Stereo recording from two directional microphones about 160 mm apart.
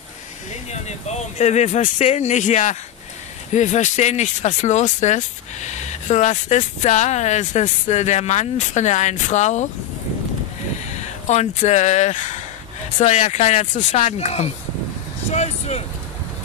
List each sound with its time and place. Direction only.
0.7 s speech: 45° left (ahead or behind)
10.9 s speech: 45° left (ahead or behind)
15.3 s vehicle: 45° left (ahead or behind)